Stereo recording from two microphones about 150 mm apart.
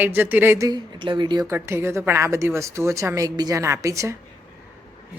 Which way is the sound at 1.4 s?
20° right (ahead or behind).